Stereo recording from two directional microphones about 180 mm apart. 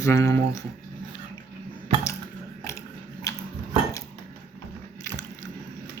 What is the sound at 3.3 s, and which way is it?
Dishes, 20° left (ahead or behind).